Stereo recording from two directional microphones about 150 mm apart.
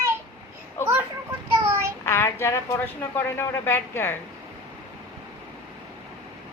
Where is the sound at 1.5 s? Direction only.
15° right (ahead or behind).